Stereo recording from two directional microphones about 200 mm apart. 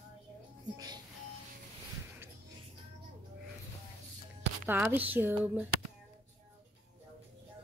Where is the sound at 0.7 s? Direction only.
20° right (ahead or behind).